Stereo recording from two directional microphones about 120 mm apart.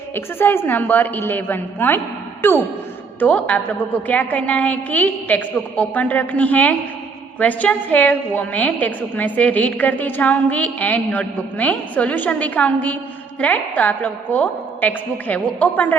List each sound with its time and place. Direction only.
0.1 s a woman's voice: 15° left (ahead or behind)
3.2 s a woman's voice: 10° left (ahead or behind)